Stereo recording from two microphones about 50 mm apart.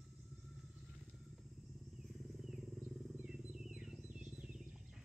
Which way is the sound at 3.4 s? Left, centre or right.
Centre.